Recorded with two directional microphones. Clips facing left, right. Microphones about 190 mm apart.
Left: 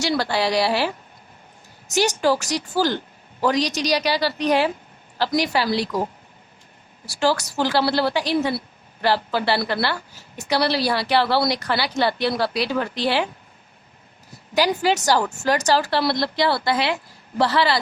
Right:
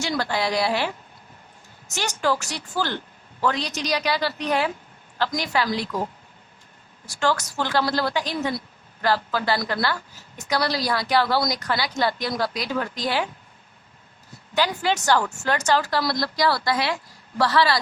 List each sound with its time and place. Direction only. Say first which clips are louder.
0.0 s a woman's voice: left 3 dB; 35° left (ahead or behind)
2.0 s a woman's voice: left 1 dB; 35° left (ahead or behind)
7.0 s a woman's voice: left 3 dB; 35° left (ahead or behind)
14.6 s speech: left 4 dB; 10° left (ahead or behind)
15.5 s speech: left 1 dB; 35° left (ahead or behind)